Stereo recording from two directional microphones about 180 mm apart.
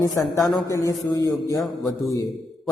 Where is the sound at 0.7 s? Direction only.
20° left (ahead or behind).